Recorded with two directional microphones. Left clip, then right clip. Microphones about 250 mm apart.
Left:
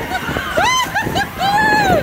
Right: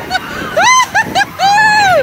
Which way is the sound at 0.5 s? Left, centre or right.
Right.